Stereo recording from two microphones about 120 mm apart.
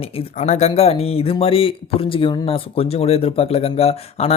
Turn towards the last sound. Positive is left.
turn(degrees=60)  # may be behind; listen again after turning